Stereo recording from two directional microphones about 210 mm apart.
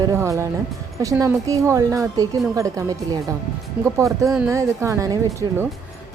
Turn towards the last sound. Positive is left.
turn(degrees=-15)  # may be behind; listen again after turning